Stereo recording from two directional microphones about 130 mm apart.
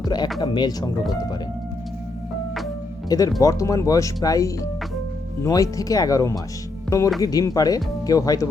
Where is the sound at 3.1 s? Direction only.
30° left (ahead or behind).